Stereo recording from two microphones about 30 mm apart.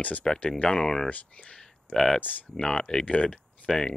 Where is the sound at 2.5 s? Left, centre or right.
Left.